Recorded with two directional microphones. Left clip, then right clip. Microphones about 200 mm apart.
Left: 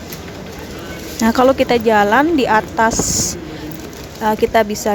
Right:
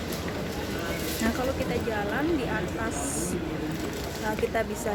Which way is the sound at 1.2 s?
40° left (ahead or behind).